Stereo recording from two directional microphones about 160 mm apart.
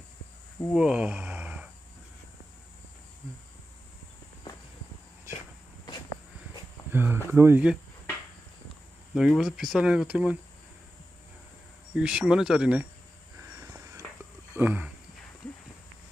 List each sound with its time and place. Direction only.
0.7 s a sound: 5° right (ahead or behind)
6.9 s speech: 10° right (ahead or behind)
9.1 s speech: centre (ahead or behind)
11.9 s speech: 5° right (ahead or behind)
14.5 s speech: 10° right (ahead or behind)